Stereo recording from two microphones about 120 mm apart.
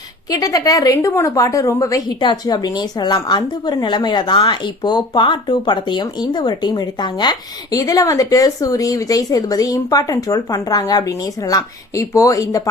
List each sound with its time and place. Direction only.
0.3 s a woman's voice: 30° left (ahead or behind)